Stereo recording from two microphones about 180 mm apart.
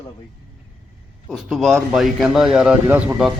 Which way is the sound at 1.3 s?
Centre (ahead or behind).